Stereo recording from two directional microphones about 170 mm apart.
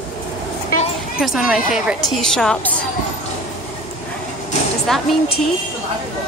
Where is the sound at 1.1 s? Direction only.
Centre (ahead or behind).